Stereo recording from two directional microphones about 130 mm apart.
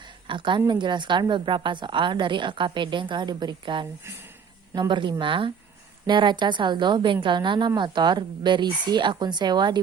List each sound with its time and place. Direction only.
0.3 s a woman's voice: 40° right (ahead or behind)